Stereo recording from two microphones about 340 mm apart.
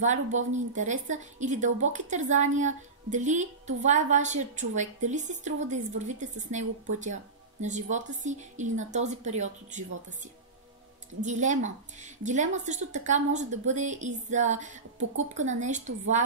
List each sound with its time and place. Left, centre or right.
0.0 s a woman's voice: right
7.6 s a woman's voice: right
11.1 s a woman's voice: right